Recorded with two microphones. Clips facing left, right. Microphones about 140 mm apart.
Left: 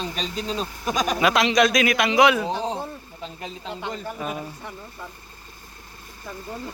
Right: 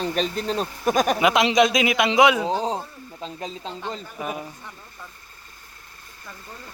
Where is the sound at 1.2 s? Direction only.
20° right (ahead or behind).